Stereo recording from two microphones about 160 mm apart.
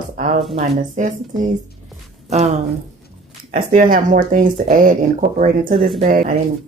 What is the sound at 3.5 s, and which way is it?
A woman's voice, 60° right (ahead or behind).